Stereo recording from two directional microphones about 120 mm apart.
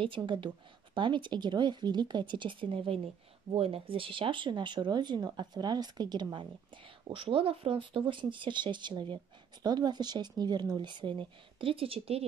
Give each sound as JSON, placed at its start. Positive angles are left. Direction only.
{"t": 0.0, "sound": "speech", "side_deg": -45}
{"t": 7.1, "sound": "speech", "side_deg": -50}